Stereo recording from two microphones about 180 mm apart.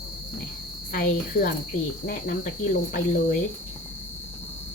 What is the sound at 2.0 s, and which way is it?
Speech, 50° left (ahead or behind).